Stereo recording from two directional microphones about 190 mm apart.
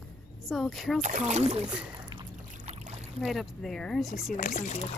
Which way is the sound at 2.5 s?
40° right (ahead or behind).